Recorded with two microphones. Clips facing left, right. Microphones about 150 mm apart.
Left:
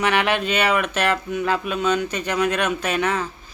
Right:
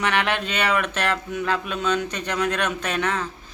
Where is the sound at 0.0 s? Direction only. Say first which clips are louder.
Left 3 dB; 5° left (ahead or behind).